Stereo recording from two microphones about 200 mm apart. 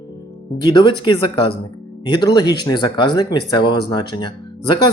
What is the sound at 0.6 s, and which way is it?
Speech, 25° left (ahead or behind).